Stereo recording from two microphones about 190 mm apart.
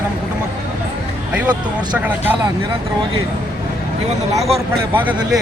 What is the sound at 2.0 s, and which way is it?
Speech, 10° right (ahead or behind).